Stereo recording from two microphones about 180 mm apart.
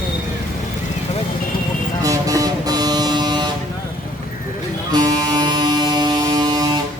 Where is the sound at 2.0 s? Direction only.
20° right (ahead or behind).